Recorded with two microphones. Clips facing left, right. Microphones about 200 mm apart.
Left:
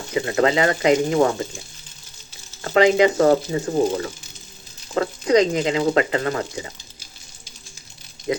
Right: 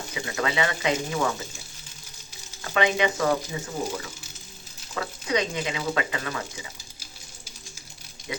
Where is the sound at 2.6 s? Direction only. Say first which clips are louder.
Left 8 dB; 40° left (ahead or behind).